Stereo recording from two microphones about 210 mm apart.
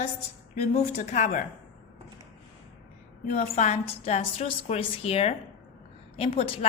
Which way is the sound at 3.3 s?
30° left (ahead or behind).